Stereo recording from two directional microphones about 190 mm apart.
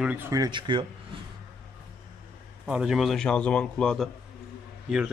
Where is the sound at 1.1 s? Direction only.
30° right (ahead or behind).